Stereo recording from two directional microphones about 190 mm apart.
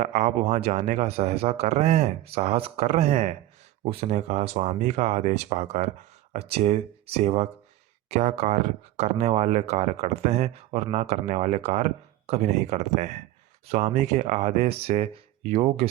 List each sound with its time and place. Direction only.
0.0 s speech: 40° right (ahead or behind)